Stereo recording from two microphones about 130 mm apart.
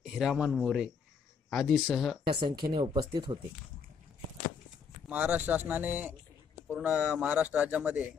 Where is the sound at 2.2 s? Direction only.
40° right (ahead or behind).